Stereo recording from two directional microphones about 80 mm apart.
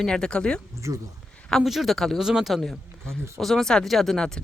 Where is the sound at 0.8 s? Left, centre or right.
Right.